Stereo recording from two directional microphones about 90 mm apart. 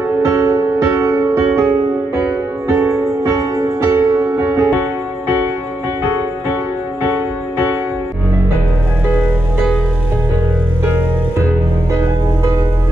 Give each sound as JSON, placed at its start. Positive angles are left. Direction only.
{"t": 0.2, "sound": "music", "side_deg": -35}
{"t": 2.7, "sound": "music", "side_deg": -25}
{"t": 3.3, "sound": "music", "side_deg": -40}